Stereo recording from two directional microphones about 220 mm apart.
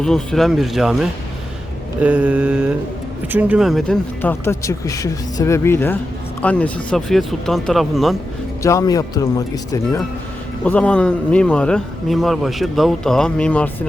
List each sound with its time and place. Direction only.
0.0 s a man's voice: centre (ahead or behind)
2.0 s a man's voice: 5° right (ahead or behind)
8.6 s speech: 15° left (ahead or behind)
10.6 s a man's voice: 5° left (ahead or behind)